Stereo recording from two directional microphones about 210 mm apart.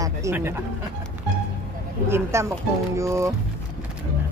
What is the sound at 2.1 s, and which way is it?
Speech, 15° right (ahead or behind).